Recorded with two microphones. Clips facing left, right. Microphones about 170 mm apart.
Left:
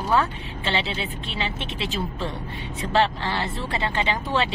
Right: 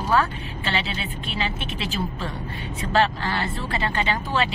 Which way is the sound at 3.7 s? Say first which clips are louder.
Even; 20° left (ahead or behind).